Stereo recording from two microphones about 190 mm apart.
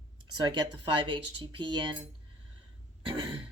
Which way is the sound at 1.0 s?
25° right (ahead or behind).